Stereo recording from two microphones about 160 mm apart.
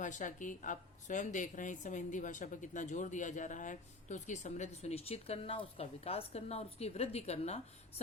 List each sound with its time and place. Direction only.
0.0 s a woman's voice: 50° left (ahead or behind)